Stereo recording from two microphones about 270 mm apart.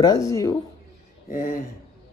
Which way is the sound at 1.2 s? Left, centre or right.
Left.